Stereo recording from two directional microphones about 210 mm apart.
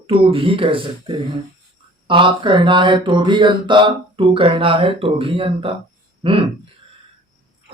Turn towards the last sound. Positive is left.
turn(degrees=-25)  # may be behind; listen again after turning